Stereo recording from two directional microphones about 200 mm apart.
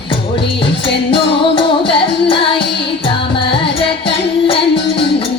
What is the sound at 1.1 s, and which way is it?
Music, 25° left (ahead or behind).